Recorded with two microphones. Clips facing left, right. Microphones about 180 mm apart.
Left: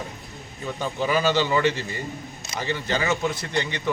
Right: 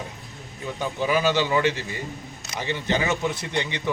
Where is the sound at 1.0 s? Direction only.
15° right (ahead or behind).